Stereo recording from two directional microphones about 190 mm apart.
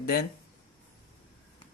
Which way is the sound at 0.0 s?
55° left (ahead or behind).